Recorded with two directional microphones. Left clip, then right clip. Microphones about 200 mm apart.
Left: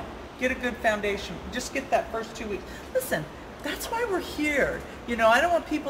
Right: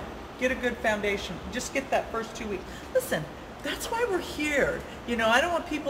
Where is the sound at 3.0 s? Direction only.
15° left (ahead or behind).